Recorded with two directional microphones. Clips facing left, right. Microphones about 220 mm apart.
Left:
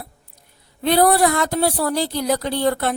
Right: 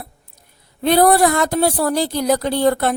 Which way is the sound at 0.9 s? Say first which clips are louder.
Right 2 dB; 50° right (ahead or behind).